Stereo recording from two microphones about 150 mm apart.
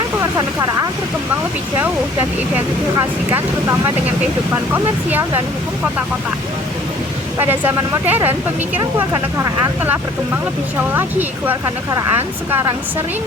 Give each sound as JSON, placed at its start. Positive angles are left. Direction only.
{"t": 3.3, "sound": "speech", "side_deg": -15}
{"t": 7.3, "sound": "speech", "side_deg": -15}